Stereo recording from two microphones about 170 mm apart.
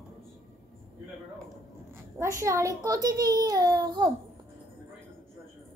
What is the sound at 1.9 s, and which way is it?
A child's voice, 15° right (ahead or behind).